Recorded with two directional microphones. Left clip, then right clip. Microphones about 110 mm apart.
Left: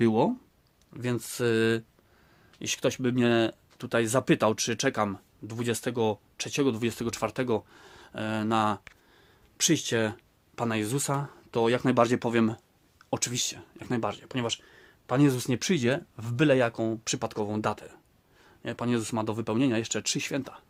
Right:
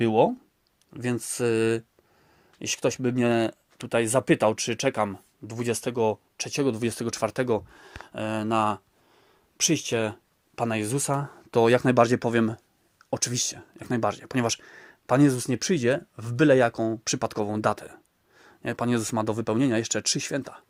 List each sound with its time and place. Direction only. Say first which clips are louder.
0.0 s speech: right 4 dB; 20° right (ahead or behind)
5.5 s speech: right 2 dB; 20° right (ahead or behind)
10.5 s speech: right 2 dB; 25° right (ahead or behind)
11.5 s speech: right 5 dB; 45° right (ahead or behind); by 12.5 s 25° right (ahead or behind)
12.5 s a sound: even; 10° right (ahead or behind)
13.1 s speech: right 2 dB; 25° right (ahead or behind)
14.1 s speech: right 5 dB; 55° right (ahead or behind)
15.2 s speech: right 3 dB; 20° right (ahead or behind)